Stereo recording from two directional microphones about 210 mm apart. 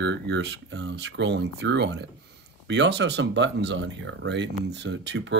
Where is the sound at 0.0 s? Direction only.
55° right (ahead or behind).